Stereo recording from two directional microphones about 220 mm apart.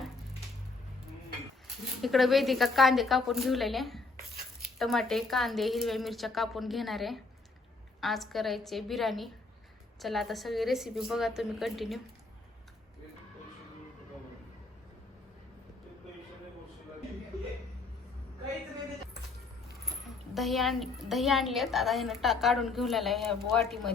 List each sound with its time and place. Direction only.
1.6 s a woman's voice: centre (ahead or behind)
20.3 s a woman's voice: centre (ahead or behind)